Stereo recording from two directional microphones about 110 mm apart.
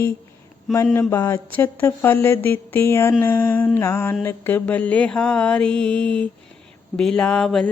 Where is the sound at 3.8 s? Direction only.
25° left (ahead or behind).